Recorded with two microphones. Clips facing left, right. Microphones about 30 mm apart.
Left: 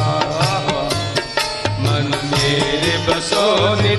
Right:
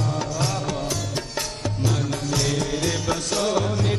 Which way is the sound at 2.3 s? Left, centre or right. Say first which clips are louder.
Left 8 dB; left.